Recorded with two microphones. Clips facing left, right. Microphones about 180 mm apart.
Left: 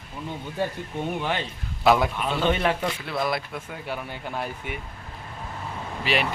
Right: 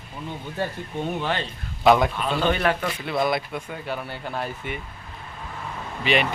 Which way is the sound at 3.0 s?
Centre (ahead or behind).